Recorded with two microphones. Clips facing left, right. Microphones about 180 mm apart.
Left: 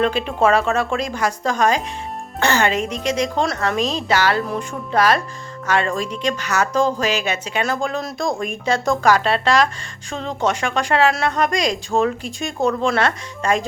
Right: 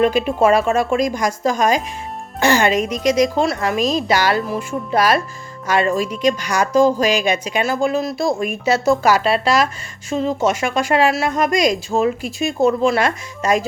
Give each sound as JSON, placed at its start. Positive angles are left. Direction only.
{"t": 0.0, "sound": "a woman's voice", "side_deg": -10}